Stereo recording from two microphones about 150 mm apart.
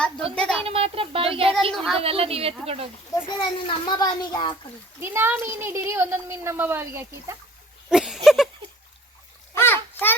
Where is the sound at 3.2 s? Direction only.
30° left (ahead or behind).